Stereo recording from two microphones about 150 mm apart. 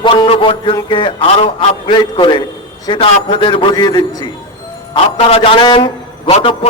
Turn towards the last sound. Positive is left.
turn(degrees=40)  # may be behind; listen again after turning